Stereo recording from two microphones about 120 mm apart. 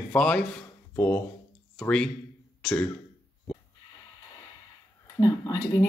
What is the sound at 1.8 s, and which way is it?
Speech, 5° left (ahead or behind).